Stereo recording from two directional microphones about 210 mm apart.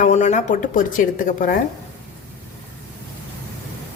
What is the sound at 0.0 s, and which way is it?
A woman's voice, 35° left (ahead or behind).